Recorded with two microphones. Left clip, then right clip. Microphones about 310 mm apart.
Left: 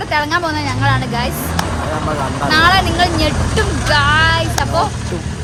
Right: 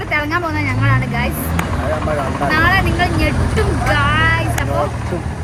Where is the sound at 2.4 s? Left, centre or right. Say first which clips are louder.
Left 3 dB; centre.